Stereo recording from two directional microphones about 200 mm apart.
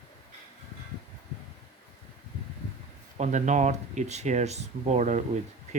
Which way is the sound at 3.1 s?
35° right (ahead or behind).